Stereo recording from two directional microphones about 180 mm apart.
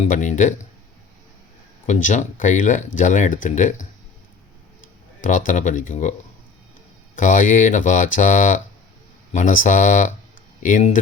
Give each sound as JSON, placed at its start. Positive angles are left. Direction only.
{"t": 0.0, "sound": "speech", "side_deg": 45}
{"t": 1.9, "sound": "speech", "side_deg": 45}
{"t": 5.5, "sound": "speech", "side_deg": 45}
{"t": 7.2, "sound": "speech", "side_deg": 45}